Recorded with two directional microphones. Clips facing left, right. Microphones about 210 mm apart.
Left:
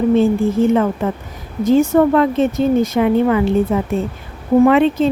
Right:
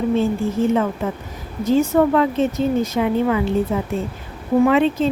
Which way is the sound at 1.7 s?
55° left (ahead or behind).